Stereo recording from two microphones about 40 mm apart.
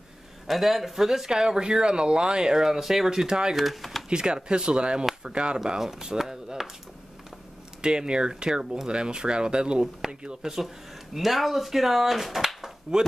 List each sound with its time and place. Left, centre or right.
0.5 s speech: centre
3.1 s speech: centre
3.5 s speech: centre
4.1 s speech: right
7.8 s speech: right
11.1 s speech: centre
12.9 s speech: centre